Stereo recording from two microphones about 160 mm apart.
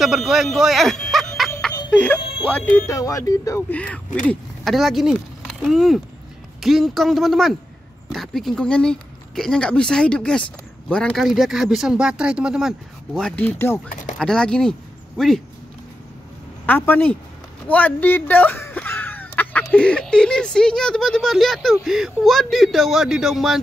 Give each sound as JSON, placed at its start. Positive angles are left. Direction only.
{"t": 0.0, "sound": "speech", "side_deg": 0}
{"t": 2.1, "sound": "music", "side_deg": 30}
{"t": 2.9, "sound": "speech", "side_deg": 20}
{"t": 3.7, "sound": "speech", "side_deg": 10}
{"t": 16.6, "sound": "speech", "side_deg": 10}
{"t": 17.6, "sound": "a sound", "side_deg": 10}
{"t": 19.7, "sound": "speech", "side_deg": 5}